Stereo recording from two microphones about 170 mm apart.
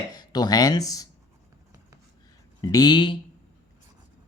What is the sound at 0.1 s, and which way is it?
Speech, 25° left (ahead or behind).